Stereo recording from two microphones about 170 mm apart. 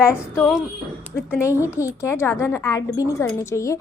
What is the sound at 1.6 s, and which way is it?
A woman's voice, 15° left (ahead or behind).